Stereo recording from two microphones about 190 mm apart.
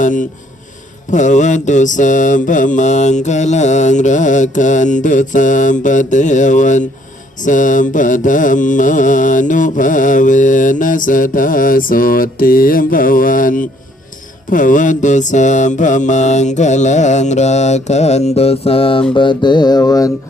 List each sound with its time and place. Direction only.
0.0 s speech: 45° left (ahead or behind)
1.1 s mantra: 40° left (ahead or behind)
19.1 s a sound: 25° left (ahead or behind)